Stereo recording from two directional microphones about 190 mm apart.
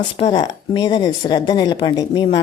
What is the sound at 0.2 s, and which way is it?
A woman's voice, 25° left (ahead or behind).